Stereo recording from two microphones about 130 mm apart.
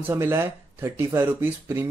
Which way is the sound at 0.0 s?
20° right (ahead or behind).